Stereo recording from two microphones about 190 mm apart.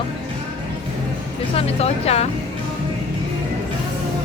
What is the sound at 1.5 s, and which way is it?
Speech, 30° left (ahead or behind).